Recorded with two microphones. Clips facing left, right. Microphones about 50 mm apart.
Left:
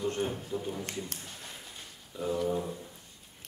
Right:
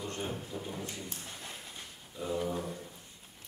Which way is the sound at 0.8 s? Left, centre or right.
Left.